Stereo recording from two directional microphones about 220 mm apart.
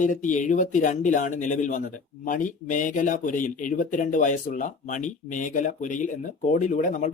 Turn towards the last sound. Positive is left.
turn(degrees=35)  # may be behind; listen again after turning